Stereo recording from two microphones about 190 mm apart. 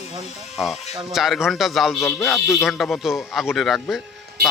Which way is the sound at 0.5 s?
Centre (ahead or behind).